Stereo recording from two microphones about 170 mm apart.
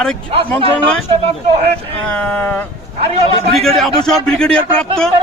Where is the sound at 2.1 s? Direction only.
5° left (ahead or behind).